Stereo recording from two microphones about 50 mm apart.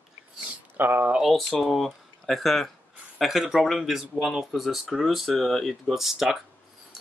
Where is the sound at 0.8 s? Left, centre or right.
Right.